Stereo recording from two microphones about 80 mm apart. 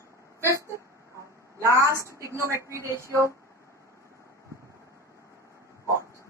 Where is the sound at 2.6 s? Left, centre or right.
Right.